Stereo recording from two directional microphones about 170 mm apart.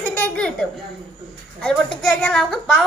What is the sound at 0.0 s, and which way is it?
Baby laughter, 10° left (ahead or behind).